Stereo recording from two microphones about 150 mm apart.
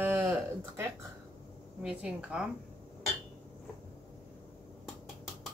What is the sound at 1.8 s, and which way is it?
Speech, 5° right (ahead or behind).